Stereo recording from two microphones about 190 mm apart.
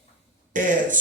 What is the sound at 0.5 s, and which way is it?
Speech, 45° right (ahead or behind).